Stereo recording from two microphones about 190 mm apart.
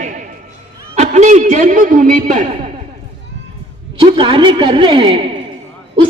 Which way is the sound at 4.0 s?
25° right (ahead or behind).